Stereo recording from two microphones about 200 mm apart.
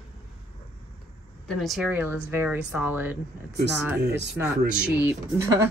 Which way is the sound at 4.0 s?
60° right (ahead or behind).